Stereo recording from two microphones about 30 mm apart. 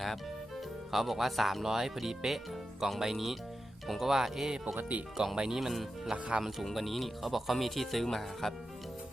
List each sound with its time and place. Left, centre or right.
0.9 s speech: centre
1.6 s speech: centre
6.1 s speech: right
6.7 s speech: centre